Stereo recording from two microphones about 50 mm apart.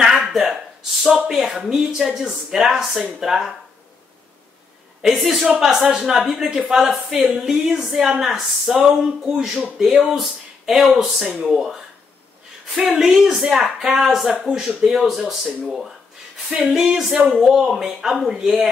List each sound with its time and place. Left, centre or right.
0.0 s a sound: centre
1.3 s speech: centre
5.0 s speech: centre
12.7 s speech: centre